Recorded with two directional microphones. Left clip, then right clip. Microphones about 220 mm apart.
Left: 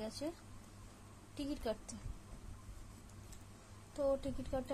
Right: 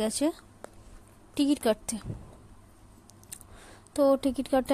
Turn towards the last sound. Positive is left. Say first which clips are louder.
# right 14 dB
turn(degrees=-40)  # may be behind; listen again after turning